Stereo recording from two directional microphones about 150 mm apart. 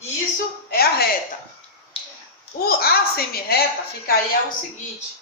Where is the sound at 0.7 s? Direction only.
90° left.